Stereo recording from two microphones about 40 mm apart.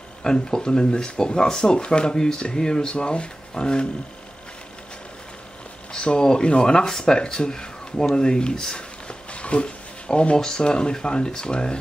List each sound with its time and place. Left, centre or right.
0.2 s speech: centre
5.9 s speech: centre